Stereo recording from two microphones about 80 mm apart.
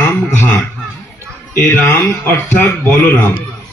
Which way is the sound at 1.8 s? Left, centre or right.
Left.